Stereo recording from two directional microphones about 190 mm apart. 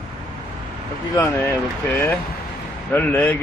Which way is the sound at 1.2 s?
10° left (ahead or behind).